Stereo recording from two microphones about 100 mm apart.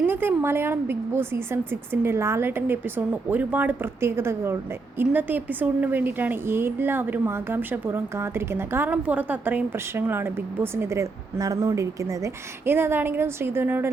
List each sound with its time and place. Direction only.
0.0 s a woman's voice: 20° right (ahead or behind)